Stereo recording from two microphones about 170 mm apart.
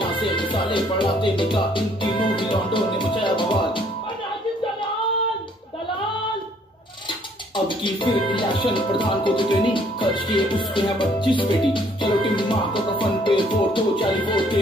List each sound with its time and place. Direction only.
0.0 s speech: 30° left (ahead or behind)
7.5 s speech: 30° left (ahead or behind)